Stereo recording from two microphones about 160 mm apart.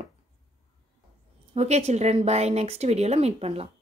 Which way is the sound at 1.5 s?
40° right (ahead or behind).